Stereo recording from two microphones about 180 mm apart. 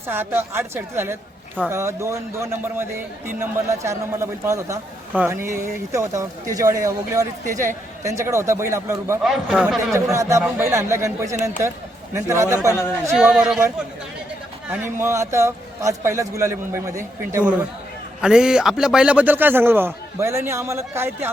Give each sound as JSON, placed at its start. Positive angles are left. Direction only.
{"t": 0.1, "sound": "a man's voice", "side_deg": -15}
{"t": 9.2, "sound": "a man's voice", "side_deg": 0}
{"t": 9.9, "sound": "a man's voice", "side_deg": -15}
{"t": 12.7, "sound": "speech", "side_deg": 15}
{"t": 13.1, "sound": "a man's voice", "side_deg": -5}
{"t": 14.7, "sound": "a man's voice", "side_deg": -10}
{"t": 18.2, "sound": "a man's voice", "side_deg": -5}